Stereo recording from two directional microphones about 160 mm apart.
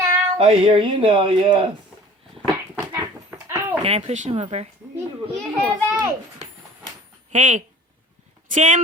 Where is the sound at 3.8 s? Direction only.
40° right (ahead or behind).